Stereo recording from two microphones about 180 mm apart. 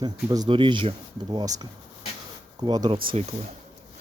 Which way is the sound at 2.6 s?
20° right (ahead or behind).